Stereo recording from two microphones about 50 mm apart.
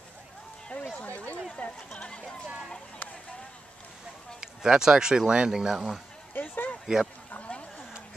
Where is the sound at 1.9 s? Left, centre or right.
Left.